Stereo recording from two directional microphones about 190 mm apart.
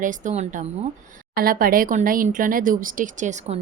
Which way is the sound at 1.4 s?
50° right (ahead or behind).